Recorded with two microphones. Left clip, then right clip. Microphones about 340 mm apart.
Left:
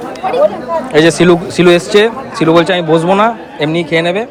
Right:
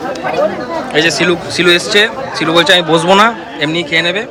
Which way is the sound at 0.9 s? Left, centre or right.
Centre.